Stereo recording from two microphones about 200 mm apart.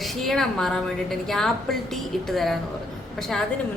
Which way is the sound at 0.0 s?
Centre (ahead or behind).